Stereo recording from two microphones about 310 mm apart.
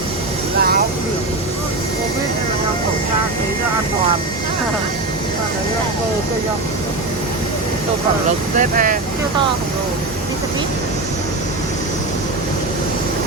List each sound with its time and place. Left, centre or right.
8.5 s speech: right